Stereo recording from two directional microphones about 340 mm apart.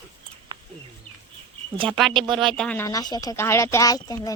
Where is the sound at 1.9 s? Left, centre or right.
Centre.